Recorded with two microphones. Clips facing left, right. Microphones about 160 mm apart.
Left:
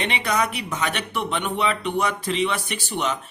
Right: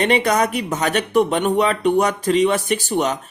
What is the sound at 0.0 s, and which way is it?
Speech, 45° right (ahead or behind).